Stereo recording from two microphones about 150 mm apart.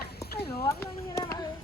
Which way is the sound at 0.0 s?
90° left.